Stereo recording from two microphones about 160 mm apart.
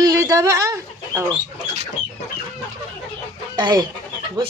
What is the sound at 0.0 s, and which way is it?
Chicken, 20° right (ahead or behind).